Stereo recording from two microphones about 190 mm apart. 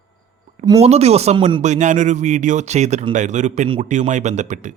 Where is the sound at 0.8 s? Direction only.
35° right (ahead or behind).